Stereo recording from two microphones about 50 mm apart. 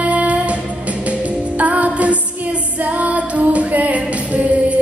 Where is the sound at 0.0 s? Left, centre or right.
Right.